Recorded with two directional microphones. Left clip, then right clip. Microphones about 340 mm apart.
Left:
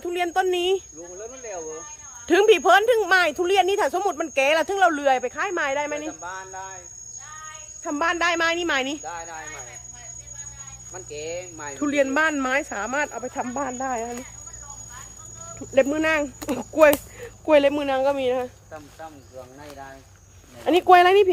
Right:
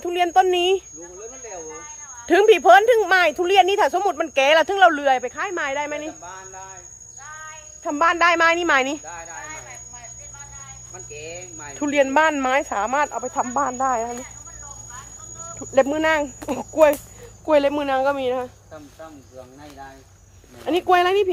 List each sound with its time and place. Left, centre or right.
0.0 s speech: centre
2.2 s a woman's voice: centre
6.2 s a sound: centre
7.9 s a woman's voice: centre
9.0 s speech: centre
10.9 s speech: centre
11.8 s a woman's voice: centre
15.5 s a woman's voice: centre
20.7 s speech: centre